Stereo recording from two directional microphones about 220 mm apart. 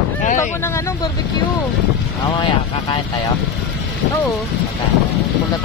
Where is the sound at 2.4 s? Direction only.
20° left (ahead or behind).